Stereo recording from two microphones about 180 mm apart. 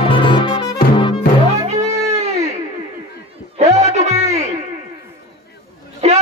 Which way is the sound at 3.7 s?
35° right (ahead or behind).